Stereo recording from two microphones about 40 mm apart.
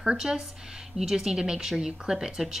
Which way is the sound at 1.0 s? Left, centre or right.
Centre.